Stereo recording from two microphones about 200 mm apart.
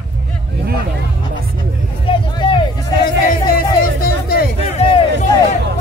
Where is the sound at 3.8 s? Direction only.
45° left (ahead or behind).